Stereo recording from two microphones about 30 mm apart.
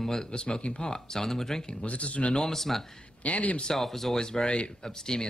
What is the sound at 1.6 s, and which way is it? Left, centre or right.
Speech, left.